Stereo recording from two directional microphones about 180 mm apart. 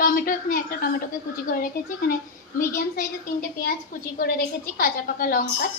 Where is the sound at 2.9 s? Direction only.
50° left (ahead or behind).